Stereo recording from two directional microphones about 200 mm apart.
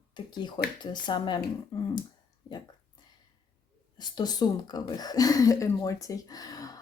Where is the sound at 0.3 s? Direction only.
20° left (ahead or behind).